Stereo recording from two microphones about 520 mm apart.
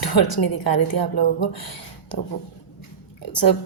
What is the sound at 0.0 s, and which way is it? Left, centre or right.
Speech, left.